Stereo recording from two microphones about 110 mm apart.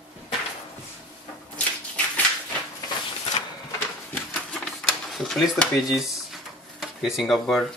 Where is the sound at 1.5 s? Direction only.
15° left (ahead or behind).